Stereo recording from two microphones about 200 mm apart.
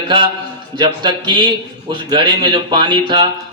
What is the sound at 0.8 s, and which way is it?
A man's voice, 25° right (ahead or behind).